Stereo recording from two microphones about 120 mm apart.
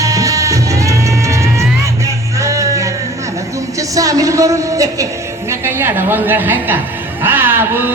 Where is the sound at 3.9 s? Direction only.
30° right (ahead or behind).